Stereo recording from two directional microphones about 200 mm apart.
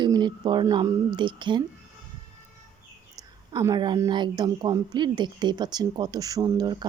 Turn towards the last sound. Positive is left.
turn(degrees=-20)  # may be behind; listen again after turning